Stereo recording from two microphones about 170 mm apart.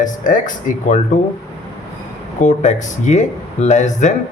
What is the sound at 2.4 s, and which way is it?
Speech, 45° left (ahead or behind).